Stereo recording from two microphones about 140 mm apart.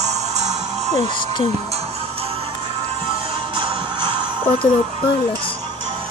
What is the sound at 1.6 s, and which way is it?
Music, 50° right (ahead or behind).